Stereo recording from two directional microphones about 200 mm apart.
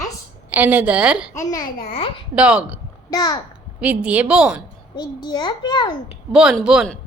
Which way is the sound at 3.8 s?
5° right (ahead or behind).